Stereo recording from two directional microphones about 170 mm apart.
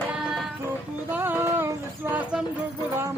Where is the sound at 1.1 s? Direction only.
10° right (ahead or behind).